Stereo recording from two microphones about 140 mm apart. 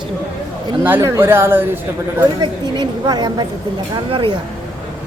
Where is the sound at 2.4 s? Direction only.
30° right (ahead or behind).